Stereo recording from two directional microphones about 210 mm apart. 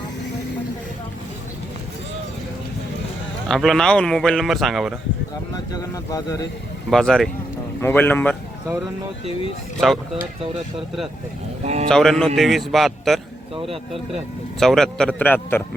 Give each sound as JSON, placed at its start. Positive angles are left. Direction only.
{"t": 3.5, "sound": "speech", "side_deg": 0}
{"t": 5.7, "sound": "a man's voice", "side_deg": 15}
{"t": 6.9, "sound": "a man's voice", "side_deg": 0}
{"t": 10.8, "sound": "speech", "side_deg": 0}
{"t": 11.6, "sound": "speech", "side_deg": -30}
{"t": 11.9, "sound": "speech", "side_deg": 5}
{"t": 14.6, "sound": "speech", "side_deg": 0}